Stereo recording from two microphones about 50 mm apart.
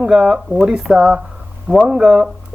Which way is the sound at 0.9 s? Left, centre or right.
Right.